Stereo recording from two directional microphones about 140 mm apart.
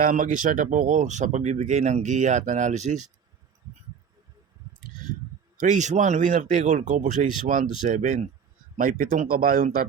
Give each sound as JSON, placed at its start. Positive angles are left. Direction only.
{"t": 0.0, "sound": "speech", "side_deg": -70}
{"t": 5.5, "sound": "speech", "side_deg": -60}
{"t": 8.8, "sound": "speech", "side_deg": -80}